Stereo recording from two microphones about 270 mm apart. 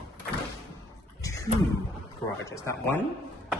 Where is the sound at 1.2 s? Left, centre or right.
Centre.